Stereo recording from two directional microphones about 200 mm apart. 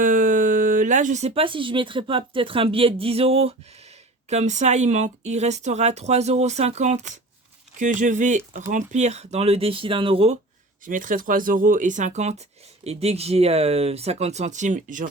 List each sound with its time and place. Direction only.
0.0 s speech: 40° right (ahead or behind); by 10.3 s 25° right (ahead or behind)
10.8 s speech: 40° right (ahead or behind)